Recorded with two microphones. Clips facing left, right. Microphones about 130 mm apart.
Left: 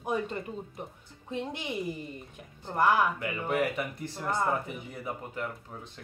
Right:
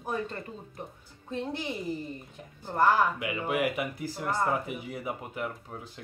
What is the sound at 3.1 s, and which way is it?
Speech, 10° right (ahead or behind).